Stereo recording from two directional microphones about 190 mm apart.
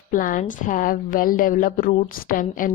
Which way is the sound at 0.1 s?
45° left (ahead or behind).